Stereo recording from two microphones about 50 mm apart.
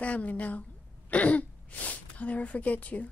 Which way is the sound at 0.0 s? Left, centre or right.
Left.